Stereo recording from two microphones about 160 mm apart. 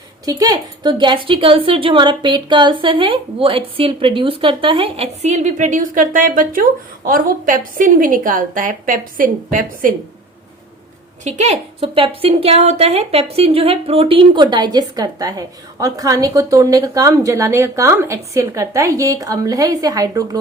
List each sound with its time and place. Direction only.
0.3 s speech: 25° right (ahead or behind); by 9.9 s 60° right (ahead or behind)
11.2 s a woman's voice: 45° right (ahead or behind); by 20.4 s 25° right (ahead or behind)